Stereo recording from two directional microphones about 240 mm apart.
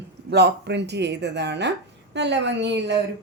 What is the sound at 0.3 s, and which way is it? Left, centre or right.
A woman's voice, right.